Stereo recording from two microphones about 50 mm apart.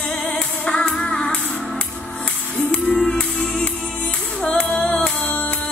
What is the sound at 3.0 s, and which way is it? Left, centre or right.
Music, centre.